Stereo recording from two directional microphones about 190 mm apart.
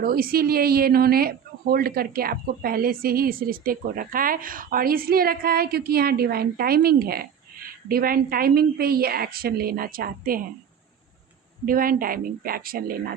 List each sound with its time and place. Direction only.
0.0 s a woman's voice: 50° right (ahead or behind)
11.6 s a woman's voice: 50° right (ahead or behind)